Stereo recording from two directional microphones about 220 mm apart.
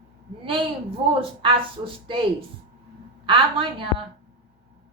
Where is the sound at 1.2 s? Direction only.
25° right (ahead or behind).